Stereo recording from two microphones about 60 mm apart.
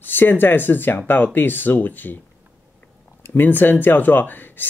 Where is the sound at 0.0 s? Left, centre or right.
Left.